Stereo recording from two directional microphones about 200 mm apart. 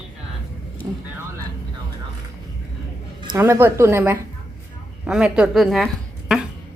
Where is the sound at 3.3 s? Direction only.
10° right (ahead or behind).